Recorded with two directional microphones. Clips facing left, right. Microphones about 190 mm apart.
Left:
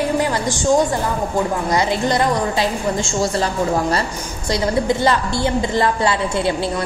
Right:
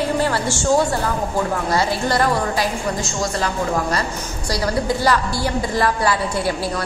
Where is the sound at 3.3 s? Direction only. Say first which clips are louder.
Even; 30° left (ahead or behind).